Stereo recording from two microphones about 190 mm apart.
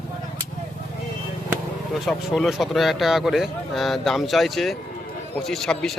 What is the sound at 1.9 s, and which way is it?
Speech, centre (ahead or behind).